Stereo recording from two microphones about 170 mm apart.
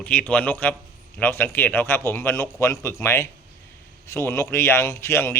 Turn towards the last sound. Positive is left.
turn(degrees=15)  # may be behind; listen again after turning